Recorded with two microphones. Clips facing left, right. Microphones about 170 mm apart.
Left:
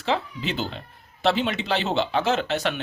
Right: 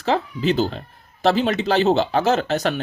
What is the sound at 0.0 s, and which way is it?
Speech, 40° right (ahead or behind).